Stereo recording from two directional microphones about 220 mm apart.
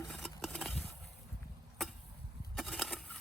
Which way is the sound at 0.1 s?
Centre (ahead or behind).